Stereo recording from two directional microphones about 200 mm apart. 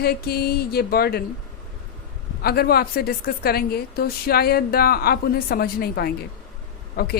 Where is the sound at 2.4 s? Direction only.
50° left (ahead or behind).